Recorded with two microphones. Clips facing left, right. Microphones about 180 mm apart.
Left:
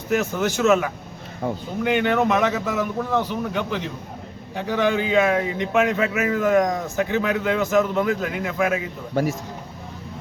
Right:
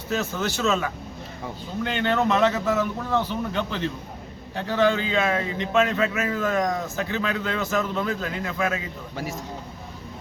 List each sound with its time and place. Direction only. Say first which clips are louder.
0.1 s speech: left 5 dB; 15° left (ahead or behind)